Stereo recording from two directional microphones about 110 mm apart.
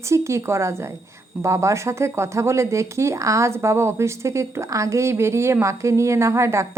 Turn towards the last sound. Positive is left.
turn(degrees=-25)  # may be behind; listen again after turning